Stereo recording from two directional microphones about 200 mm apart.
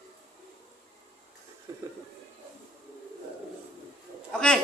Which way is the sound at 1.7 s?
15° right (ahead or behind).